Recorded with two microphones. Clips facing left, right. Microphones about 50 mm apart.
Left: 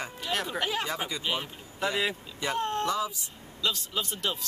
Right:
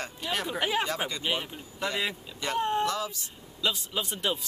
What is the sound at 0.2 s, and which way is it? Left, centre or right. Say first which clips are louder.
Speech: right 1 dB; centre.